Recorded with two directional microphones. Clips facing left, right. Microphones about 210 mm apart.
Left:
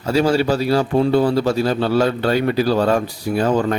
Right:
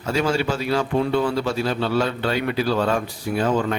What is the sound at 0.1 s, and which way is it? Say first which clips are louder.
A man's voice: left 5 dB; 35° left (ahead or behind).